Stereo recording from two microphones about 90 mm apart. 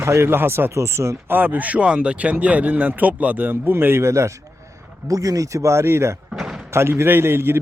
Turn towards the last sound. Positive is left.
turn(degrees=-25)  # may be behind; listen again after turning